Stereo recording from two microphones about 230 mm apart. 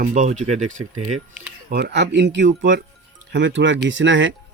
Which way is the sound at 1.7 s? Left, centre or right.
Right.